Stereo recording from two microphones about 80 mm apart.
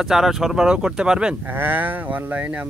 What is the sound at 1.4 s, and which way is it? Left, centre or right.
A man's voice, right.